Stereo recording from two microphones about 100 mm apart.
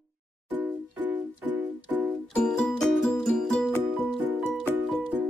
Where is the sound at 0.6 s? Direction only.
15° right (ahead or behind).